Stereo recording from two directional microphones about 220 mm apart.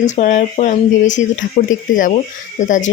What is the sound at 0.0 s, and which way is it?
Speech, 35° left (ahead or behind).